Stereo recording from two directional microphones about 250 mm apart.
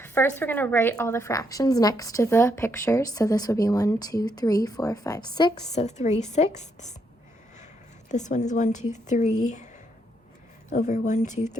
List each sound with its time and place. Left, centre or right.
0.0 s a woman's voice: centre; by 6.9 s left
8.1 s speech: left
10.7 s speech: left